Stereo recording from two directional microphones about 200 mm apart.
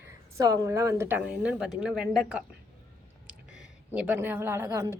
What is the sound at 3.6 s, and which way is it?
Speech, 5° right (ahead or behind).